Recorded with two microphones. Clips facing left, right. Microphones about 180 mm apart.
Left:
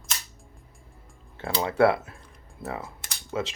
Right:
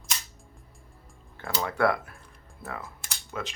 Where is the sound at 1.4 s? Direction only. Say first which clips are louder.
Left 5 dB; 25° left (ahead or behind).